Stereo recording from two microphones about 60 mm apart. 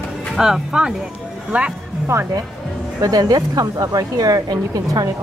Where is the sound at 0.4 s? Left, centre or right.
Centre.